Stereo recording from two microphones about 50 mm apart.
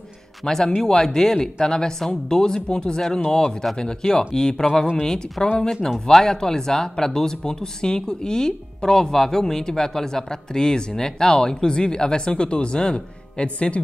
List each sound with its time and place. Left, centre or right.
0.4 s speech: centre